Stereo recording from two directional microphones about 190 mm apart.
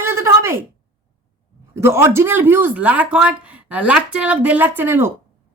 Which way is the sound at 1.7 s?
15° right (ahead or behind).